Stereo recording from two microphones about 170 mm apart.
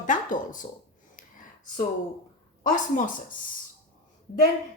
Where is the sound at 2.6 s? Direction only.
50° left (ahead or behind).